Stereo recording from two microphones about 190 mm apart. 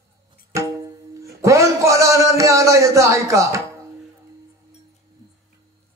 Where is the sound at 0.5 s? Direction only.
15° right (ahead or behind).